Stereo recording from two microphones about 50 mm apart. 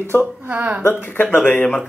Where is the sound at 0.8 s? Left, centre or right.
Left.